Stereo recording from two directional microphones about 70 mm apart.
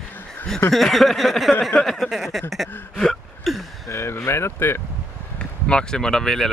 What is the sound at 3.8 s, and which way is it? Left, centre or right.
Speech, left.